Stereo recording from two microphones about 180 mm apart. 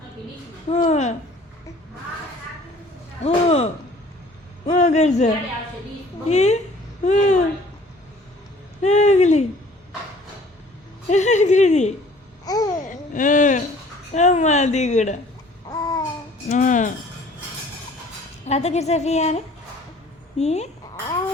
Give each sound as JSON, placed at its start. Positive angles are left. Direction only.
{"t": 0.7, "sound": "a woman's voice", "side_deg": 40}
{"t": 3.2, "sound": "a woman's voice", "side_deg": 35}
{"t": 8.8, "sound": "a woman's voice", "side_deg": 40}
{"t": 11.1, "sound": "a woman's voice", "side_deg": 40}
{"t": 12.5, "sound": "babbling", "side_deg": 20}
{"t": 12.9, "sound": "a sound", "side_deg": 45}
{"t": 14.1, "sound": "a woman's voice", "side_deg": 40}
{"t": 15.7, "sound": "babbling", "side_deg": 20}
{"t": 16.5, "sound": "speech", "side_deg": 45}
{"t": 18.4, "sound": "a woman's voice", "side_deg": 35}
{"t": 20.4, "sound": "a woman's voice", "side_deg": 35}